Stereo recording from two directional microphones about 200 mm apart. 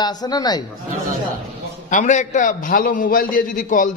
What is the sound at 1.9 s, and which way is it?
A man's voice, 35° left (ahead or behind).